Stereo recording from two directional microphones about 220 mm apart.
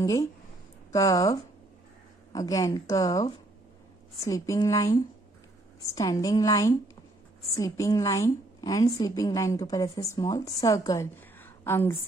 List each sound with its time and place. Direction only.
0.0 s a woman's voice: 15° left (ahead or behind)